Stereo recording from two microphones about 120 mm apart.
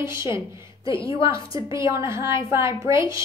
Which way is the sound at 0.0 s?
20° right (ahead or behind).